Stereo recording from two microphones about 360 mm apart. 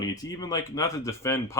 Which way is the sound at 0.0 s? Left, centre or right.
Centre.